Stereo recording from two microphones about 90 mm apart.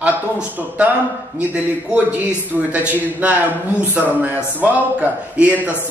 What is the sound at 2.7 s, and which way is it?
Speech, 15° right (ahead or behind).